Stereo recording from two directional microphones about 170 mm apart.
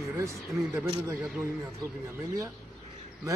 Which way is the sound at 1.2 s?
5° right (ahead or behind).